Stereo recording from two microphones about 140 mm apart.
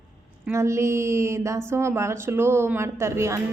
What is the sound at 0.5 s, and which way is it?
A woman's voice, 20° right (ahead or behind).